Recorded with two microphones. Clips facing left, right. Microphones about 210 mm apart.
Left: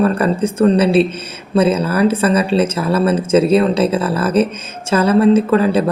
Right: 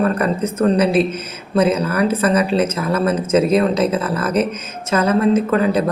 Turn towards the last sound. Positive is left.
turn(degrees=30)  # may be behind; listen again after turning